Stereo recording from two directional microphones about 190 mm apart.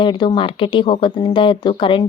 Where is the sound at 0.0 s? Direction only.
25° left (ahead or behind).